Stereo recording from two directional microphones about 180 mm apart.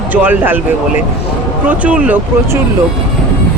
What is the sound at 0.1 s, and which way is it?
Speech, 10° right (ahead or behind).